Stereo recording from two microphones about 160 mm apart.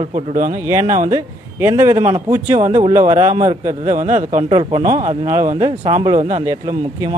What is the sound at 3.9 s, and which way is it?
Speech, 50° right (ahead or behind).